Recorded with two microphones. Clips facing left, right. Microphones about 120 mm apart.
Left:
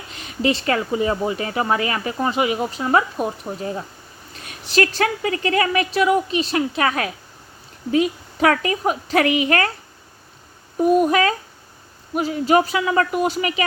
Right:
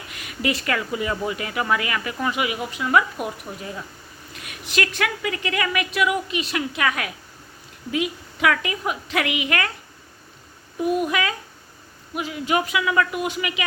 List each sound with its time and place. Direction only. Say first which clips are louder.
0.1 s speech: left 5 dB; 30° left (ahead or behind)
10.8 s speech: left 6 dB; 40° left (ahead or behind)